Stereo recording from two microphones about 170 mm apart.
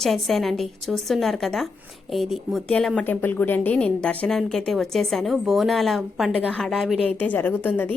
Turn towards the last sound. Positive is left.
turn(degrees=10)  # may be behind; listen again after turning